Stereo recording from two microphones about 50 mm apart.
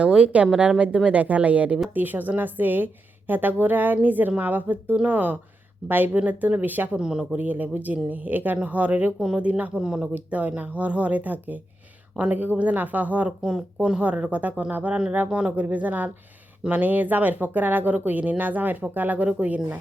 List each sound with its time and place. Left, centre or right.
0.0 s speech: right
1.0 s speech: right
6.9 s speech: centre
7.3 s speech: right
9.7 s speech: centre
10.2 s speech: right
13.4 s speech: centre
14.0 s speech: right
15.3 s speech: right
15.5 s speech: right